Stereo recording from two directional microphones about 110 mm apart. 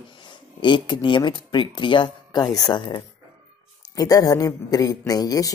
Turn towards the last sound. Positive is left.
turn(degrees=35)  # may be behind; listen again after turning